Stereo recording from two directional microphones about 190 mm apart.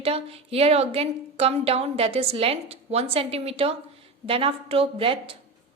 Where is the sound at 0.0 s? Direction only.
30° right (ahead or behind).